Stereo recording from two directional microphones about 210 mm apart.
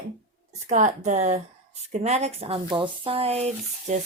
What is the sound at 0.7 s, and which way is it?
Speech, 35° right (ahead or behind).